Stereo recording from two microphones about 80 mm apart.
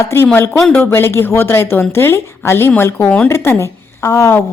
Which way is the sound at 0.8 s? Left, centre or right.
Left.